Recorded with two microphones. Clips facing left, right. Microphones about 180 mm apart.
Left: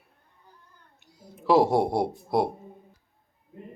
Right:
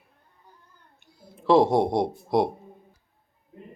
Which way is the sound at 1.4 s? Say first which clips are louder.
Right 2 dB; 5° left (ahead or behind).